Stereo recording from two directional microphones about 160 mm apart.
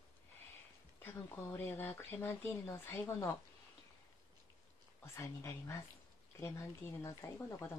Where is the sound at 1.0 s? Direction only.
10° left (ahead or behind).